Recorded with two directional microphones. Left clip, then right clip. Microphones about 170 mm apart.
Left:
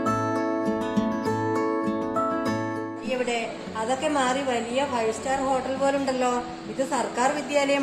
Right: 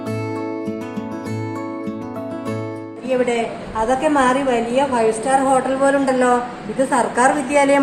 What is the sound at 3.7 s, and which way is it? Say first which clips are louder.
A woman's voice: right 8 dB; 10° left (ahead or behind).